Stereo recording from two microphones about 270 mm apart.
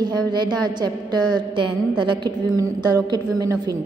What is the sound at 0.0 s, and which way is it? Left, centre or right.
A woman's voice, centre.